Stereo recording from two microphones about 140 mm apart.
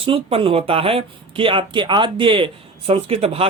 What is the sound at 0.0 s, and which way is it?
Speech, 40° right (ahead or behind).